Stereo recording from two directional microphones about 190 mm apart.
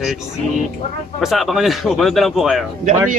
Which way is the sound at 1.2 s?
Centre (ahead or behind).